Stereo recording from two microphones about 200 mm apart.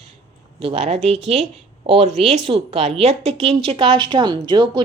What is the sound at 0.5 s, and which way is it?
A woman's voice, 30° right (ahead or behind).